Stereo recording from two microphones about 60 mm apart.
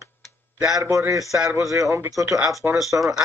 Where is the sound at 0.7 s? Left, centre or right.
Right.